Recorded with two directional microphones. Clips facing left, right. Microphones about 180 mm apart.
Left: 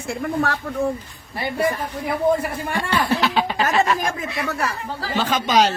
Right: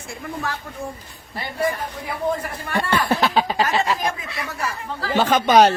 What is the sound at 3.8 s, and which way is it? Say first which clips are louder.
Speech: left 1 dB; 30° right (ahead or behind).